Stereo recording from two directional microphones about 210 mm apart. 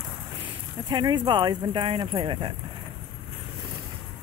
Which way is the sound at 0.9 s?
20° right (ahead or behind).